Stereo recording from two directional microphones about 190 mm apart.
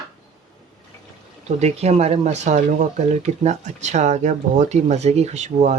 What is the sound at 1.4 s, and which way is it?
Speech, 35° right (ahead or behind).